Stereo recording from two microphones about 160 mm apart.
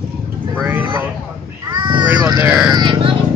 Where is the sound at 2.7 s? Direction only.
25° right (ahead or behind).